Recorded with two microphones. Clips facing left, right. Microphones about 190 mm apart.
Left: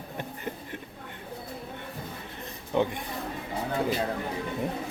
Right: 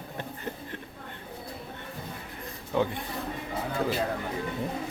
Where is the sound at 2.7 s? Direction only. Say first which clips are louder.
Left 1 dB; 15° left (ahead or behind).